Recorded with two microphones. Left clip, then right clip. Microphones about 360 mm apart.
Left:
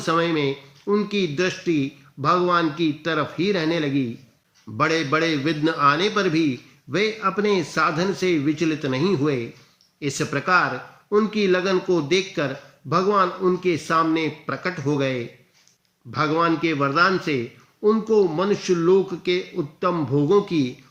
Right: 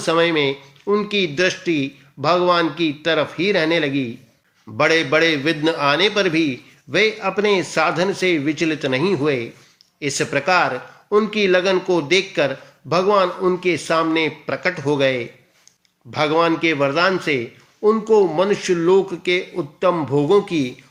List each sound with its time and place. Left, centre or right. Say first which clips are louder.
0.0 s speech: right 4 dB; centre